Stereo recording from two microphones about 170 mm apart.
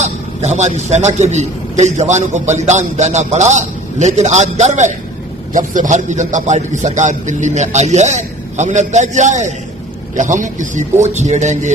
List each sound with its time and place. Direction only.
0.0 s a man's voice: 40° right (ahead or behind)